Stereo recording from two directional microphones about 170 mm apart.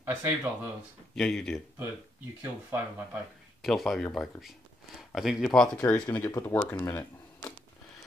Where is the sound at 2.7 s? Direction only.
15° right (ahead or behind).